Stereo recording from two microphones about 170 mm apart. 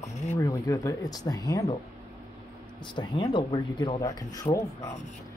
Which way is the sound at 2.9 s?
25° left (ahead or behind).